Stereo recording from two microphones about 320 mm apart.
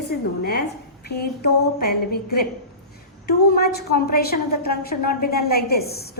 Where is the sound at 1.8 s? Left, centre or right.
Left.